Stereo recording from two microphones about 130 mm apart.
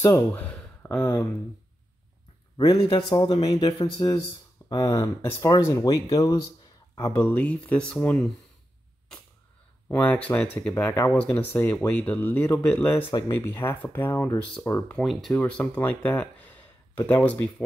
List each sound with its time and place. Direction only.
0.0 s speech: 15° left (ahead or behind)
2.5 s speech: 30° left (ahead or behind); by 8.3 s 10° left (ahead or behind)
9.8 s speech: 15° left (ahead or behind)
14.9 s speech: 5° left (ahead or behind)